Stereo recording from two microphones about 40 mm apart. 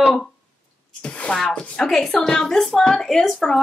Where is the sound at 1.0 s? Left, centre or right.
Left.